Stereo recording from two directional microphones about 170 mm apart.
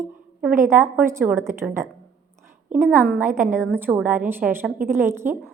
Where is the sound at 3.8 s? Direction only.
10° right (ahead or behind).